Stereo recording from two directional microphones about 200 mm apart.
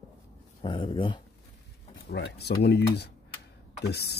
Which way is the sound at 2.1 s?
55° left (ahead or behind).